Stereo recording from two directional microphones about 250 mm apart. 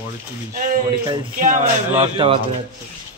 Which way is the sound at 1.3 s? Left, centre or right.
Right.